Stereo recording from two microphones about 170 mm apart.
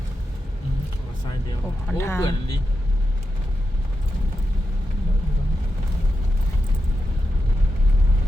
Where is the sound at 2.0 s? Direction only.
15° left (ahead or behind).